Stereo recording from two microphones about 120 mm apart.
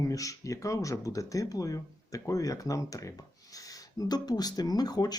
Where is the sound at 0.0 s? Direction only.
30° left (ahead or behind).